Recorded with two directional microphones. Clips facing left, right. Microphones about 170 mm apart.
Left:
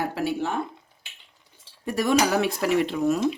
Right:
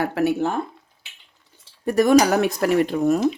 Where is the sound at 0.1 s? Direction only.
60° right (ahead or behind).